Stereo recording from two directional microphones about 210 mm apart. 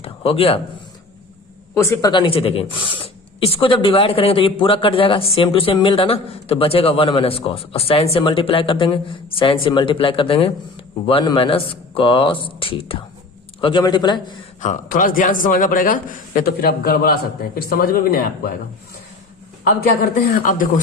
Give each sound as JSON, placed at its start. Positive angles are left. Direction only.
{"t": 0.0, "sound": "a sound", "side_deg": 25}
{"t": 1.7, "sound": "speech", "side_deg": 15}
{"t": 14.6, "sound": "a man's voice", "side_deg": 40}
{"t": 20.0, "sound": "a man's voice", "side_deg": 40}